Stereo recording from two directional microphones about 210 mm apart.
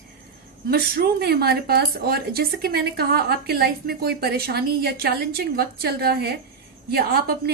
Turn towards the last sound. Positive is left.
turn(degrees=-45)  # may be behind; listen again after turning